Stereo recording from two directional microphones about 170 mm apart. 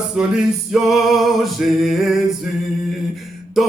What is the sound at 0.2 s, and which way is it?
Male singing, 5° right (ahead or behind).